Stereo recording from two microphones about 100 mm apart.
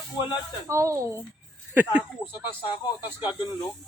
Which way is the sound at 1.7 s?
15° right (ahead or behind).